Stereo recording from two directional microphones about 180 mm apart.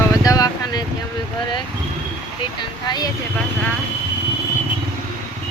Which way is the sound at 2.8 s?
20° left (ahead or behind).